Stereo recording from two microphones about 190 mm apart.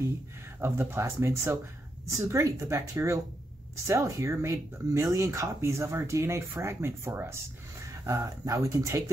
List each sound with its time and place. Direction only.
0.6 s speech: 15° right (ahead or behind)